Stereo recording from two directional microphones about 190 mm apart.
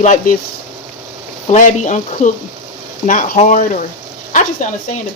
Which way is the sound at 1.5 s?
40° left (ahead or behind).